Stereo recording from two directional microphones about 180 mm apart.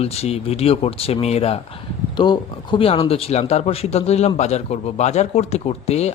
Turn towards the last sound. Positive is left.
turn(degrees=35)  # may be behind; listen again after turning